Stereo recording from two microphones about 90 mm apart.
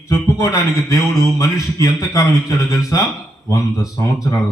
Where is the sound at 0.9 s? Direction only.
40° left (ahead or behind).